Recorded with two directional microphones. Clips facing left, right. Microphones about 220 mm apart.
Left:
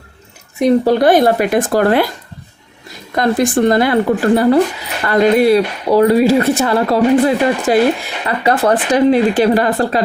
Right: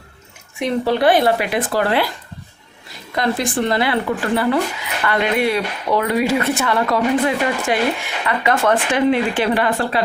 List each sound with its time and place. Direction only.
0.6 s speech: 45° left (ahead or behind)
3.2 s speech: 45° left (ahead or behind)